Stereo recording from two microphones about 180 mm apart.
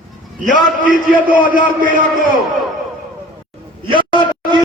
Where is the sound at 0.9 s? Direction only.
50° right (ahead or behind).